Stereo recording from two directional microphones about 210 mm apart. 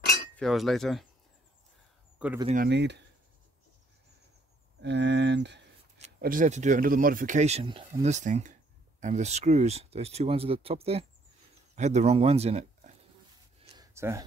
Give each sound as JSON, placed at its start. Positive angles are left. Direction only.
{"t": 0.4, "sound": "cutlery", "side_deg": 0}
{"t": 2.1, "sound": "speech", "side_deg": -5}
{"t": 2.4, "sound": "speech", "side_deg": -40}
{"t": 2.7, "sound": "speech", "side_deg": -55}
{"t": 4.8, "sound": "speech", "side_deg": -55}
{"t": 5.9, "sound": "speech", "side_deg": -40}
{"t": 13.6, "sound": "a sound", "side_deg": -15}